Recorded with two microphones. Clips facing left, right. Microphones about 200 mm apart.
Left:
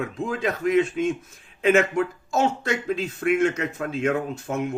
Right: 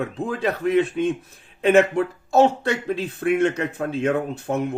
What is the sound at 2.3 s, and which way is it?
Speech, 60° right (ahead or behind).